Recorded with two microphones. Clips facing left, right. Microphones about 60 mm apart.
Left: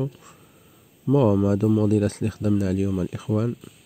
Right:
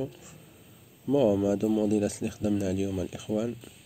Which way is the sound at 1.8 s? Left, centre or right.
Left.